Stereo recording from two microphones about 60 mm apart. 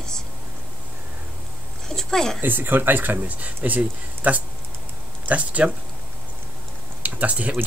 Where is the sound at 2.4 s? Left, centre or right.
Right.